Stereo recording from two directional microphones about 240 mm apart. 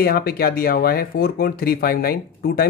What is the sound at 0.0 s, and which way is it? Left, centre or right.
Speech, left.